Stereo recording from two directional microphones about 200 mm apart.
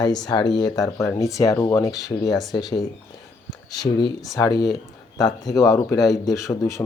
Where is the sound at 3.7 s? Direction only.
20° left (ahead or behind).